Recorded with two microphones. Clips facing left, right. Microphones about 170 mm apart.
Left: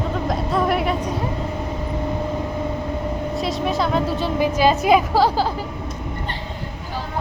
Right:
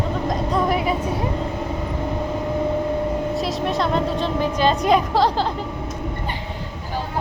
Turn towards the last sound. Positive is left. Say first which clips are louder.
# left 1 dB
turn(degrees=5)  # may be behind; listen again after turning